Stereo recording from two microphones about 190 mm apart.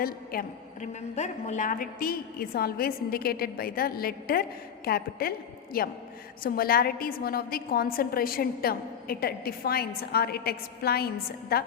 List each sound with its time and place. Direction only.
0.0 s a woman's voice: 50° left (ahead or behind)
1.1 s a woman's voice: 35° left (ahead or behind); by 11.6 s 55° left (ahead or behind)